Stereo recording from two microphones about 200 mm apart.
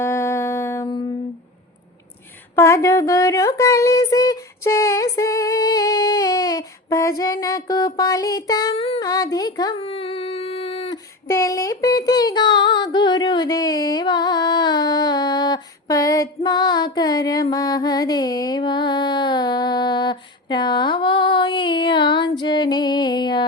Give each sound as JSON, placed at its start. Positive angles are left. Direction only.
{"t": 0.0, "sound": "music", "side_deg": 15}
{"t": 2.6, "sound": "a sound", "side_deg": 15}
{"t": 7.2, "sound": "child singing", "side_deg": 20}
{"t": 11.3, "sound": "child singing", "side_deg": 15}